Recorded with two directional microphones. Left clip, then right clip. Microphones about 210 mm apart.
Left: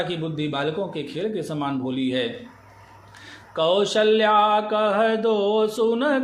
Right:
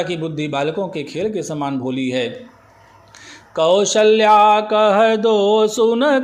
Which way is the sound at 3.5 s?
25° right (ahead or behind).